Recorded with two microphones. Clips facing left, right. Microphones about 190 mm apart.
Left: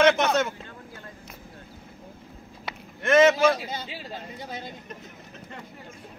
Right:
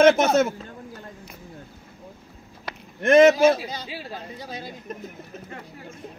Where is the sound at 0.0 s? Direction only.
45° right (ahead or behind).